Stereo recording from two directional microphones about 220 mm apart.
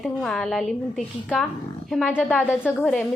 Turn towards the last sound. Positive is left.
turn(degrees=5)  # may be behind; listen again after turning